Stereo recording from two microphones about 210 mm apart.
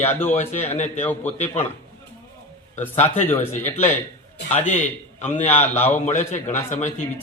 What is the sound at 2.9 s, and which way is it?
Speech, 30° left (ahead or behind).